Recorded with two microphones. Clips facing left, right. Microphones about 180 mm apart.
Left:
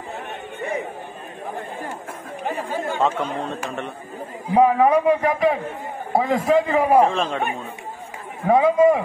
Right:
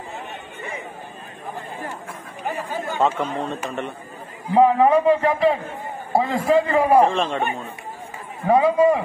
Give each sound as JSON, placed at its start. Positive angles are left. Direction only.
{"t": 2.5, "sound": "speech", "side_deg": 25}
{"t": 3.0, "sound": "a man's voice", "side_deg": 0}
{"t": 6.9, "sound": "a man's voice", "side_deg": 0}
{"t": 8.5, "sound": "speech", "side_deg": 20}